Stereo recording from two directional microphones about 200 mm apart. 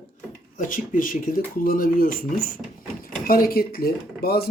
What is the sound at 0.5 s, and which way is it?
Speech, 45° left (ahead or behind).